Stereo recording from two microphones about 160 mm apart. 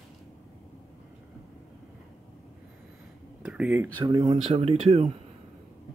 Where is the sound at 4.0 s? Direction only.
25° right (ahead or behind).